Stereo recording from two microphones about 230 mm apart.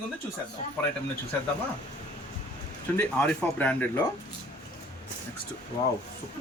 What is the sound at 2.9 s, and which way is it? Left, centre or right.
Speech, centre.